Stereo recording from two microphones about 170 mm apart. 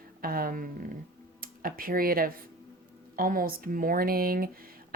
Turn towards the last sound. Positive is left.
turn(degrees=-60)  # may be behind; listen again after turning